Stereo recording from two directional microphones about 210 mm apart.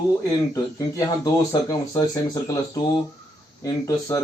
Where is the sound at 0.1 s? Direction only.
15° left (ahead or behind).